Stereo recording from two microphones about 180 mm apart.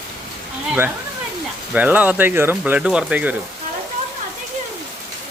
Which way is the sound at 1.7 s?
10° right (ahead or behind).